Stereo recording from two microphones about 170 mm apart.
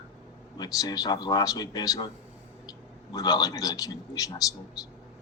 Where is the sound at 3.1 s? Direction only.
20° left (ahead or behind).